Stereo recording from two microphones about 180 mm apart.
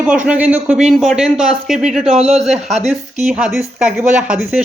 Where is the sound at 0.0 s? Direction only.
5° right (ahead or behind).